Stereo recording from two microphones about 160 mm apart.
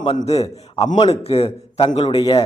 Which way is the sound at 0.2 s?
40° left (ahead or behind).